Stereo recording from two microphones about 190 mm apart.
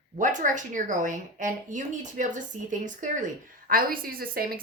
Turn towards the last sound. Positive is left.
turn(degrees=-50)  # may be behind; listen again after turning